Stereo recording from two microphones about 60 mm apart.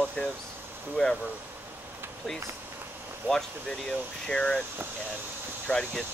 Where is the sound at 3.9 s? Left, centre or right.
Centre.